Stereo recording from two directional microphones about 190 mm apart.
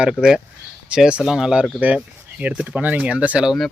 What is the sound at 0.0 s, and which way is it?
Speech, 5° right (ahead or behind).